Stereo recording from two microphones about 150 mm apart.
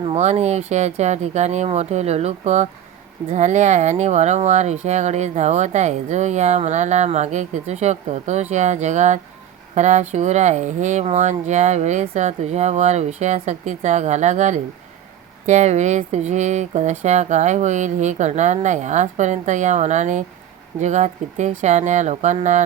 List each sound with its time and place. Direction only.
0.0 s speech: 45° right (ahead or behind)